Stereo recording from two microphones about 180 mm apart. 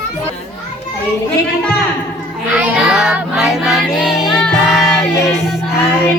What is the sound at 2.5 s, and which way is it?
Child singing, 5° right (ahead or behind).